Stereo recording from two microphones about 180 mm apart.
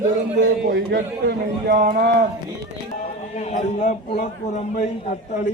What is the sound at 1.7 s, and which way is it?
Speech, 55° right (ahead or behind).